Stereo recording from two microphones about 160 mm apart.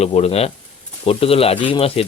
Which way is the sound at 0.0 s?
40° left (ahead or behind).